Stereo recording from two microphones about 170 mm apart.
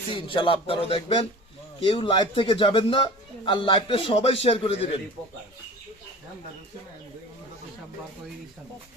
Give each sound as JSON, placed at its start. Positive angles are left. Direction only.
{"t": 0.1, "sound": "a man's voice", "side_deg": 30}